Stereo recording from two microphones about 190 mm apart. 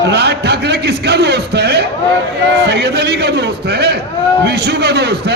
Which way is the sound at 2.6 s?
60° right (ahead or behind).